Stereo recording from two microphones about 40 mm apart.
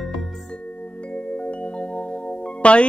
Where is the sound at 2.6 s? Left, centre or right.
Left.